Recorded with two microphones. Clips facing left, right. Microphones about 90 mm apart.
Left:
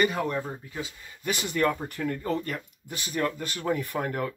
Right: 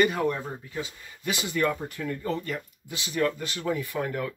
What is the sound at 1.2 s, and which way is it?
Speech, 50° left (ahead or behind).